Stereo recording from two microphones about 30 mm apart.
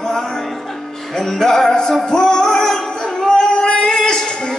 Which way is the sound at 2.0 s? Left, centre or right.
Centre.